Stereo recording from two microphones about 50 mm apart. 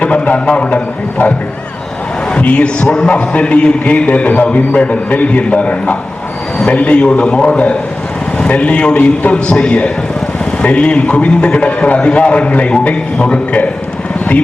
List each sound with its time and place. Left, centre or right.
0.0 s a man's voice: left
2.4 s a man's voice: left
2.8 s a man's voice: centre